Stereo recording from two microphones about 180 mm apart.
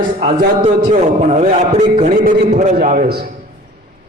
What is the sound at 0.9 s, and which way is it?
A man's voice, 40° right (ahead or behind).